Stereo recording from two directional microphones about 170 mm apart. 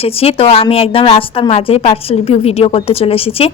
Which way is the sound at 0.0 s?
35° left (ahead or behind).